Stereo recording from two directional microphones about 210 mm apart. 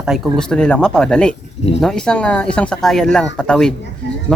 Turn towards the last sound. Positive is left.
turn(degrees=5)  # may be behind; listen again after turning